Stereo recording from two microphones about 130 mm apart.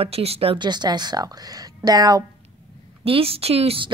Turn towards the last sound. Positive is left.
turn(degrees=-45)  # may be behind; listen again after turning